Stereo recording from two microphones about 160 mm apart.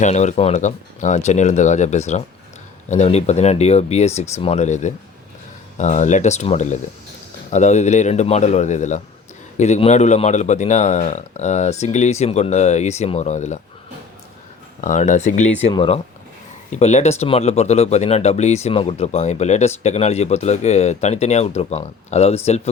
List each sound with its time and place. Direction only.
0.0 s speech: 45° left (ahead or behind)
14.8 s speech: 50° left (ahead or behind)
15.7 s speech: 35° left (ahead or behind)
16.7 s speech: 45° left (ahead or behind)